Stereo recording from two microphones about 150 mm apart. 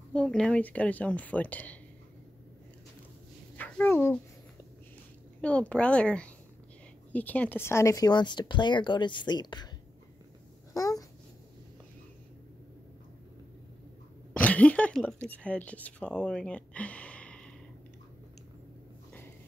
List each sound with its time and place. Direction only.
0.1 s speech: 5° left (ahead or behind)
3.5 s speech: 10° left (ahead or behind)
5.4 s speech: 10° left (ahead or behind); by 9.7 s 30° left (ahead or behind)
10.7 s babbling: 25° left (ahead or behind)
14.3 s speech: 10° left (ahead or behind)